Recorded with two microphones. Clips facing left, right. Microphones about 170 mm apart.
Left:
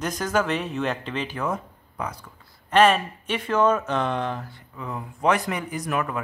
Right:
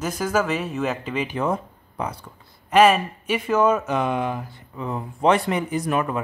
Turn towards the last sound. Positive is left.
turn(degrees=-25)  # may be behind; listen again after turning